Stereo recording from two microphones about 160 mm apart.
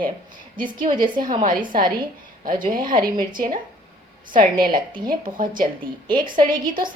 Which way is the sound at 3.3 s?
60° right (ahead or behind).